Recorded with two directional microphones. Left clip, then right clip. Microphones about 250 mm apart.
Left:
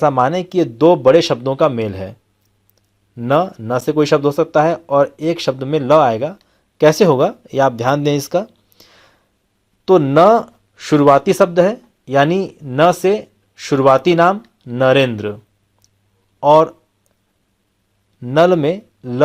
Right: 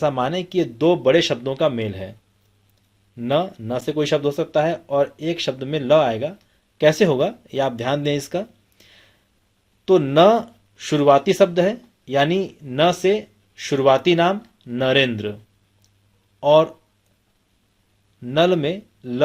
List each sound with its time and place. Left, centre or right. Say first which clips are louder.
0.0 s speech: left 7 dB; left
3.2 s speech: left 6 dB; left
16.4 s speech: left 5 dB; left
18.2 s speech: left 6 dB; left